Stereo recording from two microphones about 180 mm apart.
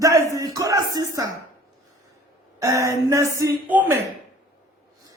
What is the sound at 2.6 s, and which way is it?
A man's voice, 20° right (ahead or behind).